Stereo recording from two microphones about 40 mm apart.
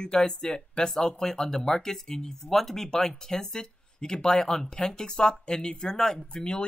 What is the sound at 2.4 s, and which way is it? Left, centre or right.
A woman's voice, centre.